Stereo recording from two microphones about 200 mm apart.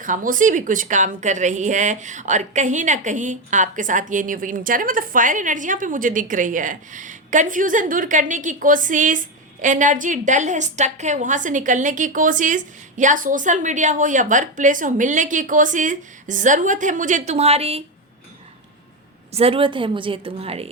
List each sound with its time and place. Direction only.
0.0 s a woman's voice: 40° right (ahead or behind)
19.3 s a woman's voice: 30° right (ahead or behind)